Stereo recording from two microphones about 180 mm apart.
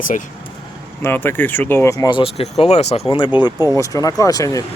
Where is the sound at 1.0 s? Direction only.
10° left (ahead or behind).